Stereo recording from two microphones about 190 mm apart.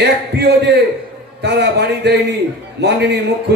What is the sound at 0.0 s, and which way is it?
A man's voice, 60° right (ahead or behind).